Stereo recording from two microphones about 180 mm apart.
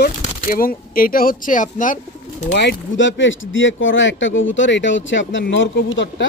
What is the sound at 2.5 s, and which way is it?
Speech, 70° left (ahead or behind).